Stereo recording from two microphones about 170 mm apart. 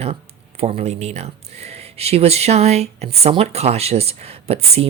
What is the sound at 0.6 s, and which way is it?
Speech, 40° right (ahead or behind).